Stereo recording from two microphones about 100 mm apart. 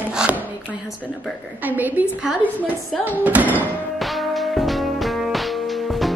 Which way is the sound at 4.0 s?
Centre (ahead or behind).